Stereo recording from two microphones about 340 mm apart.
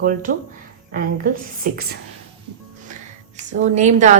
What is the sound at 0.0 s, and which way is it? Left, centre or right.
A woman's voice, right.